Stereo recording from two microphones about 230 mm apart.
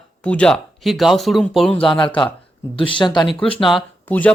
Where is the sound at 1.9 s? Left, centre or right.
Left.